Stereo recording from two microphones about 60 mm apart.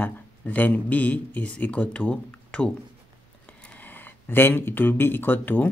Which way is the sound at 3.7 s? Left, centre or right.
Left.